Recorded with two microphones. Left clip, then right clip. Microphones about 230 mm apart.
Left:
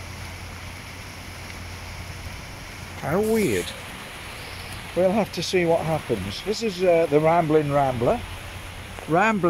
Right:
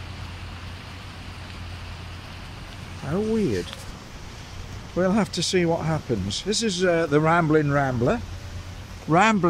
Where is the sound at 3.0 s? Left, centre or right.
Centre.